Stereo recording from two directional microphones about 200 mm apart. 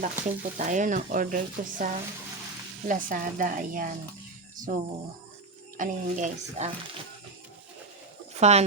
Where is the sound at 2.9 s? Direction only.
40° right (ahead or behind).